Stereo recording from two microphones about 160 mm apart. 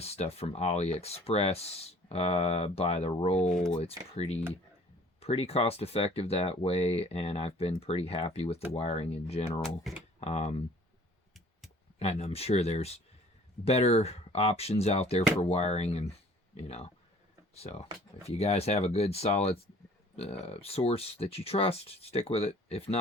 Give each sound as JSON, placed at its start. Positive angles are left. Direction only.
{"t": 0.0, "sound": "speech", "side_deg": 40}
{"t": 9.6, "sound": "speech", "side_deg": 5}
{"t": 10.2, "sound": "speech", "side_deg": 40}
{"t": 11.9, "sound": "speech", "side_deg": 40}